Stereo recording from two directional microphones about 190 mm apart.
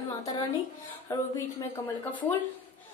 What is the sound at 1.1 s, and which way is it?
A woman's voice, 15° left (ahead or behind).